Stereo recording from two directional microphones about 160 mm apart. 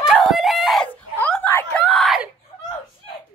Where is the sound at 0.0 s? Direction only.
Centre (ahead or behind).